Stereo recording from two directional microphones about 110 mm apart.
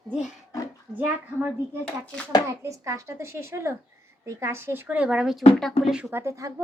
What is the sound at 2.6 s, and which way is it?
A woman's voice, 25° right (ahead or behind).